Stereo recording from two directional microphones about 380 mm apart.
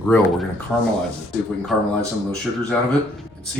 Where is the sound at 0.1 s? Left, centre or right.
Centre.